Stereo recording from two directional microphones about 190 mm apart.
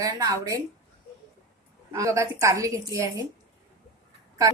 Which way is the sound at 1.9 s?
15° right (ahead or behind).